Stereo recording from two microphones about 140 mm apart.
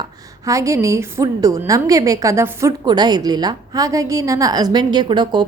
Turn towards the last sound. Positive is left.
turn(degrees=-35)  # may be behind; listen again after turning